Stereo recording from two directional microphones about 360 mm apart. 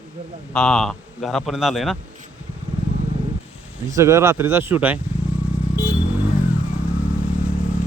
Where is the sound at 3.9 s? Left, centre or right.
Centre.